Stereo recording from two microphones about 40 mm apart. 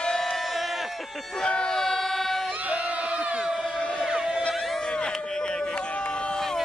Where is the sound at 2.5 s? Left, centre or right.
Right; by 4.5 s centre.